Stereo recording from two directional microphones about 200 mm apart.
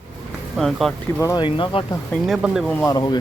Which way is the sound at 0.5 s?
Centre (ahead or behind).